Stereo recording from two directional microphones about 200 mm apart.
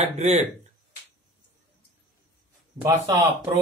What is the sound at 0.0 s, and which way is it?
Speech, 35° right (ahead or behind).